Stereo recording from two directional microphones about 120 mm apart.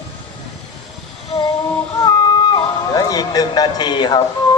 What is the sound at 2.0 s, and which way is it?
Music, 35° left (ahead or behind).